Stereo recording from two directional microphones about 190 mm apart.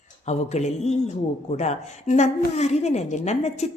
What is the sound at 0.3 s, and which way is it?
Speech, 35° left (ahead or behind).